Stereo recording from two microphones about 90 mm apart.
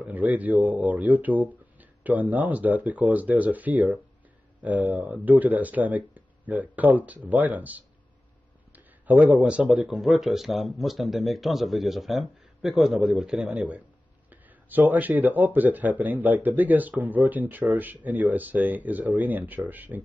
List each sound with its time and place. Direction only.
0.0 s a man's voice: 20° right (ahead or behind)